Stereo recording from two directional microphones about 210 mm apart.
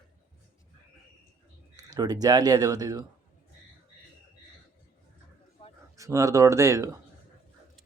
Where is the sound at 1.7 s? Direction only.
15° right (ahead or behind).